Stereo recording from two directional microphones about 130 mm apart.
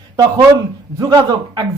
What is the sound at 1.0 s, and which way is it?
Speech, 30° right (ahead or behind).